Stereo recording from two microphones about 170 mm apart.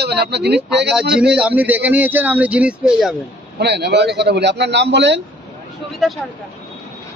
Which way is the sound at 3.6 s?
80° right.